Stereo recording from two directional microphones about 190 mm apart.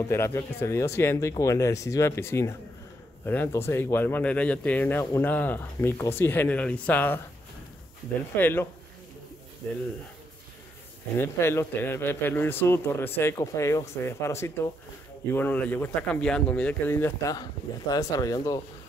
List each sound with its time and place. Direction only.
0.0 s speech: 15° left (ahead or behind)
8.4 s speech: 10° left (ahead or behind)
11.1 s speech: 15° left (ahead or behind)